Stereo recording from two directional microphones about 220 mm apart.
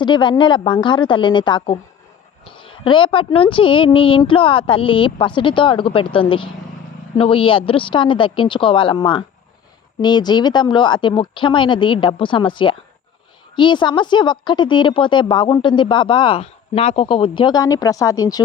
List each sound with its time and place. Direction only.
0.0 s a woman's voice: 20° left (ahead or behind)